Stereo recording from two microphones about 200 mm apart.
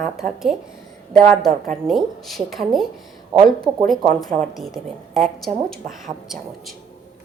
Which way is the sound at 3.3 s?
25° right (ahead or behind).